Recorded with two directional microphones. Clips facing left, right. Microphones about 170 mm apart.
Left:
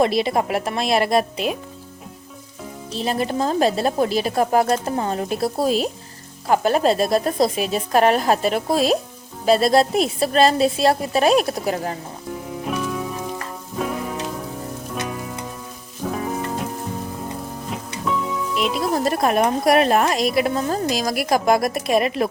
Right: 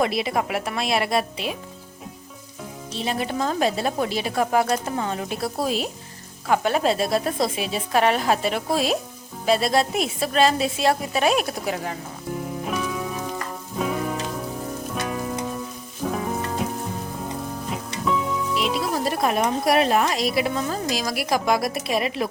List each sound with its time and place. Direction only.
0.0 s a woman's voice: 35° left (ahead or behind)
2.9 s a woman's voice: 40° left (ahead or behind)
12.6 s music: centre (ahead or behind)
14.9 s sizzle: centre (ahead or behind)
16.1 s frying: centre (ahead or behind)
17.7 s music: centre (ahead or behind)
19.0 s speech: 50° left (ahead or behind)